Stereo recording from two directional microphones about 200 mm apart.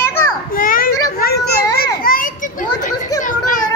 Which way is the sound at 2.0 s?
45° left (ahead or behind).